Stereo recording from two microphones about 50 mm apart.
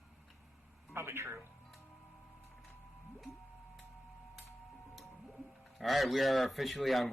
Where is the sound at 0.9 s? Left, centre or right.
Right.